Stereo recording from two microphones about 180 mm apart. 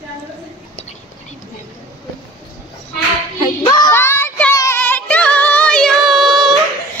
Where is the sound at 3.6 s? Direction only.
20° left (ahead or behind); by 6.5 s centre (ahead or behind).